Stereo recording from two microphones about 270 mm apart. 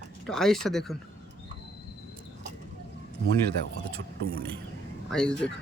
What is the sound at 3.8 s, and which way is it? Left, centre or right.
Speech, right.